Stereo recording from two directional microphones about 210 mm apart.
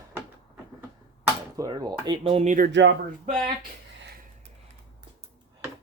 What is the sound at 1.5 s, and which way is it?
Speech, 20° right (ahead or behind).